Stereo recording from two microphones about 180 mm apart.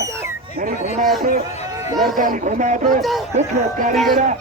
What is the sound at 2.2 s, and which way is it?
Speech, 45° right (ahead or behind).